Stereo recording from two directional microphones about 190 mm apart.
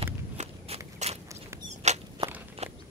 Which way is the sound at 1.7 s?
35° right (ahead or behind).